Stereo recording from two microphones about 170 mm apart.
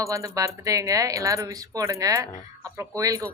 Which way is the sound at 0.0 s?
20° right (ahead or behind).